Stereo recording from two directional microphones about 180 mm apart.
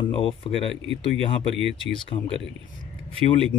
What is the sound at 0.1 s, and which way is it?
Speech, 30° left (ahead or behind).